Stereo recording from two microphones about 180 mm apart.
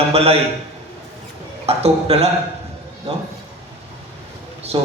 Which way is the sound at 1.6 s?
35° right (ahead or behind).